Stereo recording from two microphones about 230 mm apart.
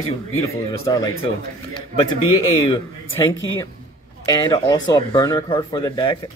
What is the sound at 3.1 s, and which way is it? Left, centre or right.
Speech, left.